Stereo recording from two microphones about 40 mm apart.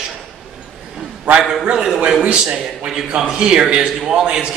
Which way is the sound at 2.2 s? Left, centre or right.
Right.